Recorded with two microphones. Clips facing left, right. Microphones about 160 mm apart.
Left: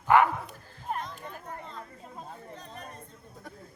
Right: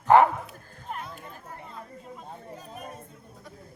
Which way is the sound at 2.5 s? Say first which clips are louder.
Right 3 dB; 10° right (ahead or behind).